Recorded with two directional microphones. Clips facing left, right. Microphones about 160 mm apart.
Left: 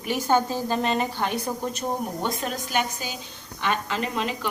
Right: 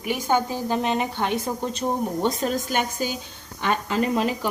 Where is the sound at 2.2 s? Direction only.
35° right (ahead or behind).